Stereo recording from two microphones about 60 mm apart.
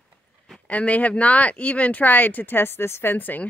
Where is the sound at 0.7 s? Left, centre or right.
Left.